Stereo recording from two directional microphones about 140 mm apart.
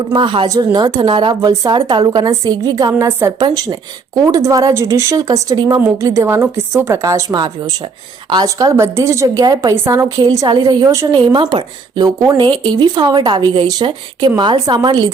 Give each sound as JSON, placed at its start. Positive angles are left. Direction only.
{"t": 0.1, "sound": "a woman's voice", "side_deg": -35}
{"t": 9.7, "sound": "a woman's voice", "side_deg": -15}
{"t": 10.2, "sound": "a woman's voice", "side_deg": -30}
{"t": 11.3, "sound": "a woman's voice", "side_deg": -35}